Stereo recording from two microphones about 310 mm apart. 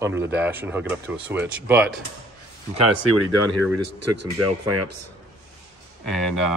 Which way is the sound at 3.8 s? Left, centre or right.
Right.